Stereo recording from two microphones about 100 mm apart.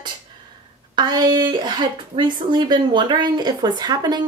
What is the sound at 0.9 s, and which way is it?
A woman's voice, 50° right (ahead or behind).